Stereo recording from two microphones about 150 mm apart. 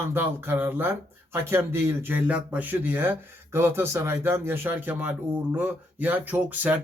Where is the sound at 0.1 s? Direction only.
15° right (ahead or behind).